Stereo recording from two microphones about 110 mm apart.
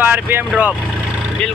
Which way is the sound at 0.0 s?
20° right (ahead or behind).